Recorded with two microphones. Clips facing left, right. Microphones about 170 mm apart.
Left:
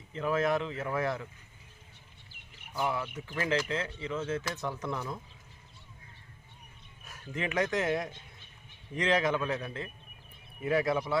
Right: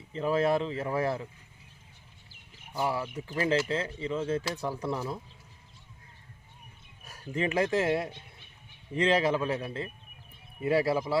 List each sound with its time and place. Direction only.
0.1 s speech: 30° right (ahead or behind)
2.8 s speech: 30° right (ahead or behind)
7.0 s speech: 35° right (ahead or behind)